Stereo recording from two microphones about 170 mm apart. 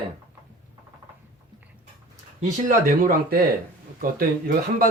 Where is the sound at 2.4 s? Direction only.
55° right (ahead or behind).